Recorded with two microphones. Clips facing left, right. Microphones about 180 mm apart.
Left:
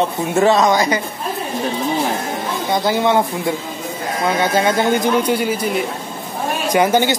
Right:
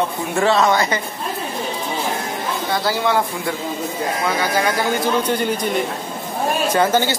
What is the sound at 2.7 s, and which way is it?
Speech, 20° left (ahead or behind).